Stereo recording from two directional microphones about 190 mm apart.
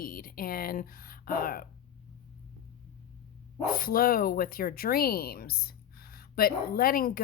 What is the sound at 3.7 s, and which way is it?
Speech, 50° left (ahead or behind).